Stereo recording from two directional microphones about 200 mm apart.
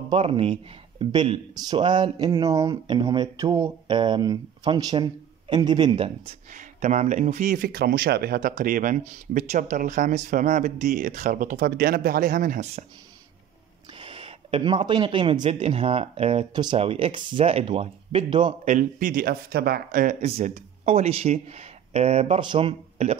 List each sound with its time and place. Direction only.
0.1 s speech: 25° right (ahead or behind)
13.9 s speech: 25° right (ahead or behind)
18.7 s speech: 40° right (ahead or behind)